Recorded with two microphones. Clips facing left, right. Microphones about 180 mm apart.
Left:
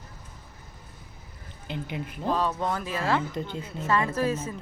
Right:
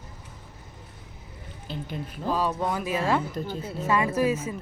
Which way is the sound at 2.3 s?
10° right (ahead or behind).